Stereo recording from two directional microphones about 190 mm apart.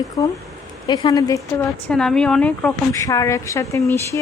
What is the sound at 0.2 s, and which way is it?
A woman's voice, 20° left (ahead or behind).